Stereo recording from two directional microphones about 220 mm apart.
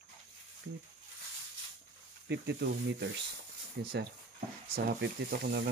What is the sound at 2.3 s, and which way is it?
Speech, 50° right (ahead or behind).